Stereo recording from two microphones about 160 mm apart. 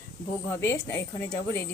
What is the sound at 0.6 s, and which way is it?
A woman's voice, 15° left (ahead or behind).